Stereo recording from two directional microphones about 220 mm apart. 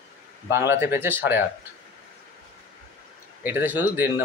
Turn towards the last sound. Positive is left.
turn(degrees=-10)  # may be behind; listen again after turning